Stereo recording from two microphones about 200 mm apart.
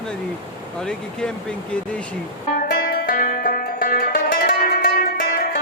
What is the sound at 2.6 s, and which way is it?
Music, 50° left (ahead or behind).